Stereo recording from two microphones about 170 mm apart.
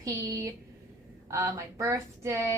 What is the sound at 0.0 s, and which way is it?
Speech, 20° right (ahead or behind).